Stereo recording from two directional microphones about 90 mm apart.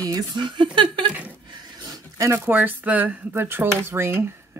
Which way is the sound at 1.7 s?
45° right (ahead or behind).